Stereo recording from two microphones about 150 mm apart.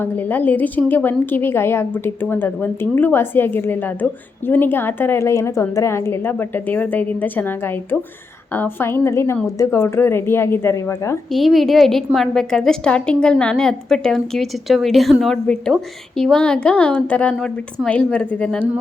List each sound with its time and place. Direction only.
0.0 s a woman's voice: 10° left (ahead or behind)
11.3 s a woman's voice: centre (ahead or behind)
17.3 s a woman's voice: 5° right (ahead or behind)
17.8 s a woman's voice: 10° left (ahead or behind)